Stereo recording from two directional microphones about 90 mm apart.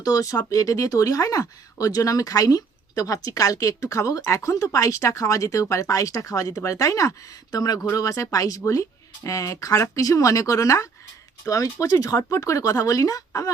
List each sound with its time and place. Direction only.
0.0 s speech: 40° left (ahead or behind)